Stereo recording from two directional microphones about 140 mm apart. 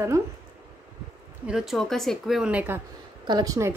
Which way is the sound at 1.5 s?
5° right (ahead or behind).